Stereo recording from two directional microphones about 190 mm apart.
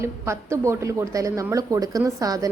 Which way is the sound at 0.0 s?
15° right (ahead or behind).